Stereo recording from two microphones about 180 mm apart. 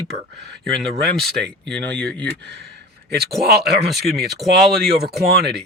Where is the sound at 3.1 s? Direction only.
60° right (ahead or behind).